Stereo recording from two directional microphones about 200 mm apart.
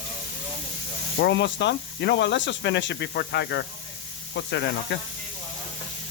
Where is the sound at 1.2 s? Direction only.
60° left (ahead or behind).